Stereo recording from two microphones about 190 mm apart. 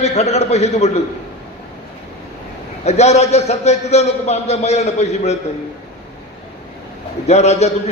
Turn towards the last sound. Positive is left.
turn(degrees=35)  # may be behind; listen again after turning